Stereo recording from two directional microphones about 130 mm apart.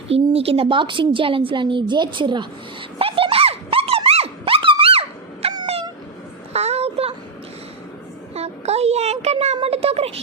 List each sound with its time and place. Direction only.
0.1 s a woman's voice: 50° right (ahead or behind)
3.0 s a sound: 45° right (ahead or behind)
8.4 s a child's voice: 55° right (ahead or behind)